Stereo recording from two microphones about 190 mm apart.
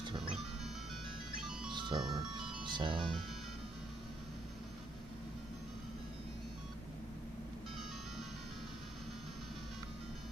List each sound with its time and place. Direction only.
0.2 s music: centre (ahead or behind)
1.7 s music: 25° right (ahead or behind)
2.1 s speech: 25° right (ahead or behind)